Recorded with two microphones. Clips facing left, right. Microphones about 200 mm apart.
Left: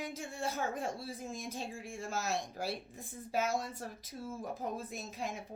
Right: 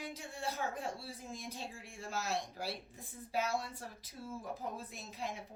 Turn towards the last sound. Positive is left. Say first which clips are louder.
# left 3 dB
turn(degrees=45)  # may be behind; listen again after turning